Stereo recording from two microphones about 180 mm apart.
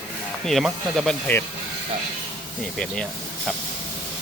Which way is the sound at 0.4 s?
Centre (ahead or behind).